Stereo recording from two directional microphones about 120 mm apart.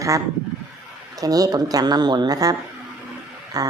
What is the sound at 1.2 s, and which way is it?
A woman's voice, 30° right (ahead or behind).